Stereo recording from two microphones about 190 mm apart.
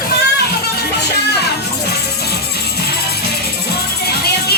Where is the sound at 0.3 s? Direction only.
55° left (ahead or behind).